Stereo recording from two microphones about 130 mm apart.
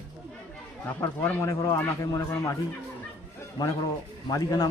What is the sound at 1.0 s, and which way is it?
Speech, 20° left (ahead or behind).